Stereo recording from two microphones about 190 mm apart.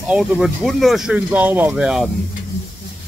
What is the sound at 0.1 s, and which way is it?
Speech, centre (ahead or behind).